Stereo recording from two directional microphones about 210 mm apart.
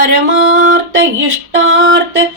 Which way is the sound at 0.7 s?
65° right (ahead or behind).